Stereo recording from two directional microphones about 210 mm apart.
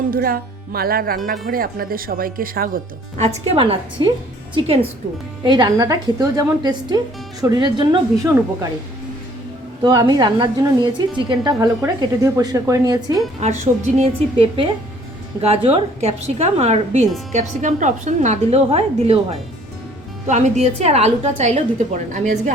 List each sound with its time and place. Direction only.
0.1 s a woman's voice: 45° right (ahead or behind); by 8.3 s 20° right (ahead or behind)
9.8 s a woman's voice: 20° right (ahead or behind)
13.4 s a woman's voice: 35° right (ahead or behind)